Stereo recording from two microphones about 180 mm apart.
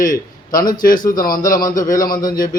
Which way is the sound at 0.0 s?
50° left (ahead or behind).